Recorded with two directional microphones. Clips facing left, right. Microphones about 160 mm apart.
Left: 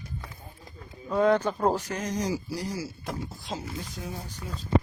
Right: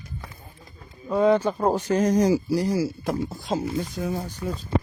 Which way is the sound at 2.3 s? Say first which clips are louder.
Right 10 dB; 70° right (ahead or behind).